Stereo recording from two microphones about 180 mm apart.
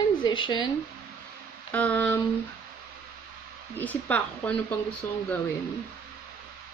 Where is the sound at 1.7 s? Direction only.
10° left (ahead or behind).